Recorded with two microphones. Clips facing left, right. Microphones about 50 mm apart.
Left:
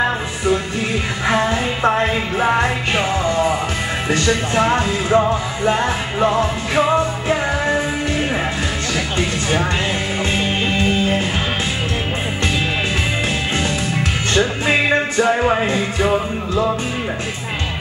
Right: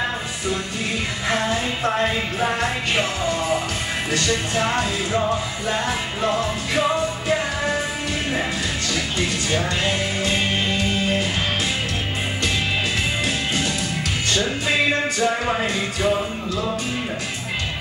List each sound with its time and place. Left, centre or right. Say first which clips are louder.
1.3 s music: left 4 dB; left
4.1 s music: left 5 dB; left
14.3 s music: left 5 dB; left